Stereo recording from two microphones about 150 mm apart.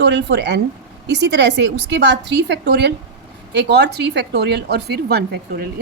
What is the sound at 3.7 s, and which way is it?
A woman's voice, 90° right.